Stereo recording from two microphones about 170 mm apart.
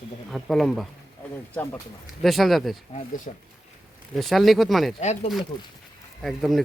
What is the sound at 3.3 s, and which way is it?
Speech, 45° left (ahead or behind).